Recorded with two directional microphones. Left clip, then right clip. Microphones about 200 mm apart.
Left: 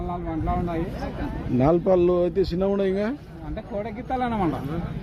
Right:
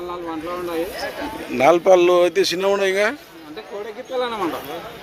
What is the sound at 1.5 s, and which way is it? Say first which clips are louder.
Speech: right 7 dB; 15° right (ahead or behind).